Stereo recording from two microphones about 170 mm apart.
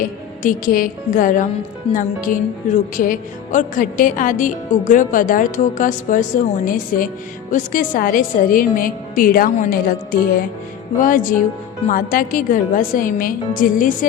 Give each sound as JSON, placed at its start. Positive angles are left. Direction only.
{"t": 0.0, "sound": "a woman's voice", "side_deg": 55}